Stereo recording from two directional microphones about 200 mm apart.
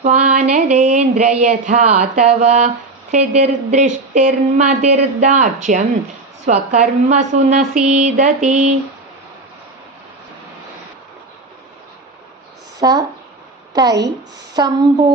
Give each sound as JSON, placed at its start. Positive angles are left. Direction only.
{"t": 0.0, "sound": "speech", "side_deg": -30}
{"t": 12.8, "sound": "speech", "side_deg": -20}